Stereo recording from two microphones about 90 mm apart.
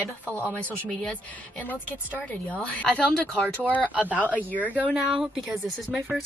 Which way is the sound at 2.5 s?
15° left (ahead or behind).